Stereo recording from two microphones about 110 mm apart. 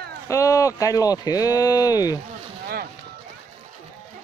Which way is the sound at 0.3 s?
30° left (ahead or behind).